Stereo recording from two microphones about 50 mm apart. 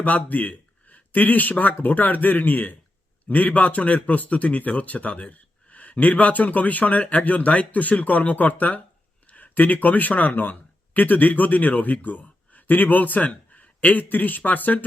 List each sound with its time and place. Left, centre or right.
0.0 s a man's voice: left